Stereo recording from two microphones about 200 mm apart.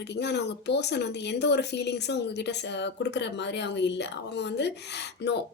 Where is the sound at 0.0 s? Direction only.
55° left (ahead or behind).